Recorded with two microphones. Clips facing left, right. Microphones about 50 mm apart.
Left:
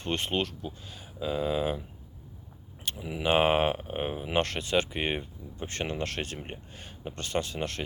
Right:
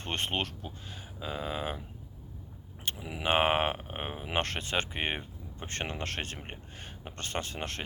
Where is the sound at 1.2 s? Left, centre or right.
Centre.